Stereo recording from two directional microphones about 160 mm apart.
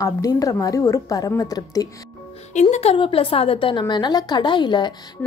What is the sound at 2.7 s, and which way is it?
A woman's voice, 35° left (ahead or behind).